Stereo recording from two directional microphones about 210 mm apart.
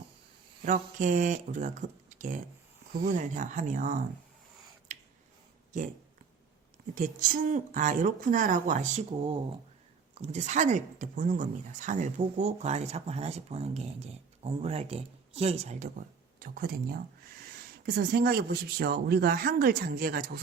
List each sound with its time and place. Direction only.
0.6 s a woman's voice: 40° right (ahead or behind)
4.9 s a sound: 35° right (ahead or behind)
6.9 s a woman's voice: 40° right (ahead or behind)
16.4 s speech: 45° right (ahead or behind)